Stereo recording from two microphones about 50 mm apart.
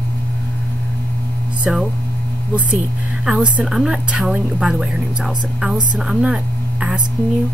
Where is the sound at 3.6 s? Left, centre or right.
Centre.